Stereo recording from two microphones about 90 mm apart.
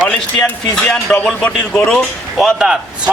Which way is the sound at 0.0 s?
15° left (ahead or behind).